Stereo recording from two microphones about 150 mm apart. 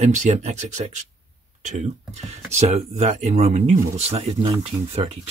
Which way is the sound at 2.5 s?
45° right (ahead or behind).